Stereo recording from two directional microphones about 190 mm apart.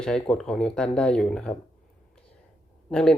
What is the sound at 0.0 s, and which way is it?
Speech, 5° left (ahead or behind).